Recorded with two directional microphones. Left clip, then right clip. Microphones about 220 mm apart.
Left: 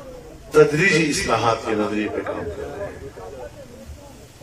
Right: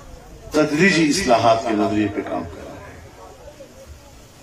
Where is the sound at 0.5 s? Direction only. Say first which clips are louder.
Left 2 dB; 20° right (ahead or behind).